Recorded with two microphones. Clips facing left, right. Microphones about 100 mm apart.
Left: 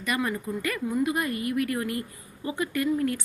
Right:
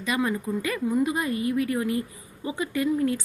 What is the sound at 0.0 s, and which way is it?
Speech, 20° right (ahead or behind).